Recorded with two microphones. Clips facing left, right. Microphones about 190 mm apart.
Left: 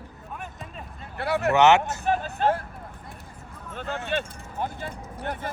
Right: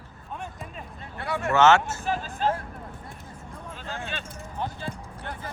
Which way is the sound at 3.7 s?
55° left (ahead or behind).